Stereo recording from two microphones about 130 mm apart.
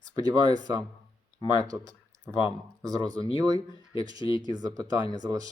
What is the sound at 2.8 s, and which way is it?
Speech, 30° right (ahead or behind).